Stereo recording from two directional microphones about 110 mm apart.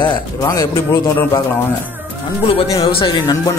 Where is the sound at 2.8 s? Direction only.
50° left (ahead or behind).